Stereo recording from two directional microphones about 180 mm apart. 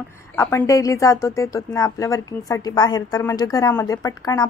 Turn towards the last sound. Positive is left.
turn(degrees=20)  # may be behind; listen again after turning